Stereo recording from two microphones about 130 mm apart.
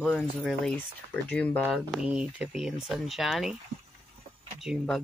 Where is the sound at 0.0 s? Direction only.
5° left (ahead or behind).